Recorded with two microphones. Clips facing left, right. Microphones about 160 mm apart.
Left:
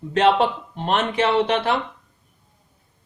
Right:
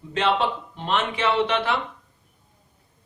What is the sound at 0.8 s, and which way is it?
Speech, 45° left (ahead or behind).